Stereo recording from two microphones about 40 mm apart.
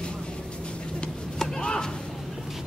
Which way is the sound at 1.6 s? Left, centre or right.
Left.